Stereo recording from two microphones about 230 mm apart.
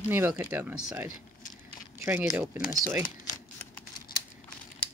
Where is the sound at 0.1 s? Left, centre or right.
Centre.